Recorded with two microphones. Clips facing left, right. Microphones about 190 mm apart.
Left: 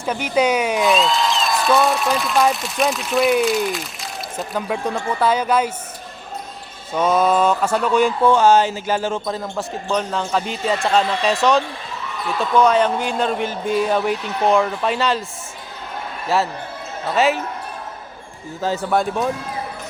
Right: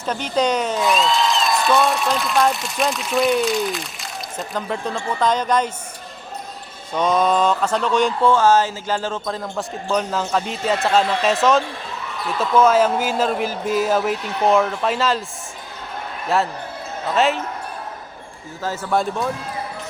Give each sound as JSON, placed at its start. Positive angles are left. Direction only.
{"t": 0.0, "sound": "speech", "side_deg": 10}
{"t": 0.9, "sound": "speech", "side_deg": 0}
{"t": 6.9, "sound": "speech", "side_deg": 5}
{"t": 9.2, "sound": "speech", "side_deg": 5}
{"t": 16.3, "sound": "speech", "side_deg": 0}
{"t": 18.6, "sound": "speech", "side_deg": 15}